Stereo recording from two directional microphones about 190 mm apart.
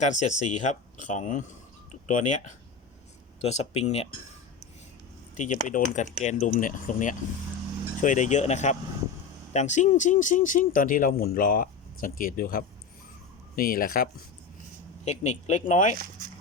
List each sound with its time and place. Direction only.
0.0 s speech: 40° left (ahead or behind)
5.4 s speech: 40° left (ahead or behind)
15.0 s speech: 40° left (ahead or behind)